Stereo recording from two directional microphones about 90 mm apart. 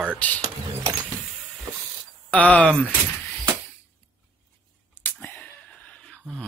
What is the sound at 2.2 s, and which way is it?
Speech, 15° left (ahead or behind).